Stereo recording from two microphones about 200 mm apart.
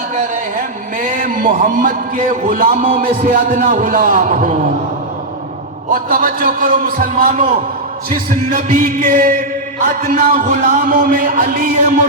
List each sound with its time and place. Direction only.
1.2 s a man's voice: 40° right (ahead or behind)
5.9 s a man's voice: 45° right (ahead or behind)
8.5 s a man's voice: 40° right (ahead or behind)